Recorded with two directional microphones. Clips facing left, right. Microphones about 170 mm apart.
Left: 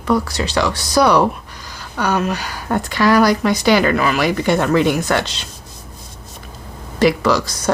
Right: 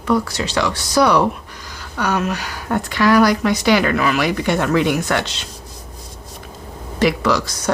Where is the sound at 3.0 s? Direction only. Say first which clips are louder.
Even; 35° left (ahead or behind).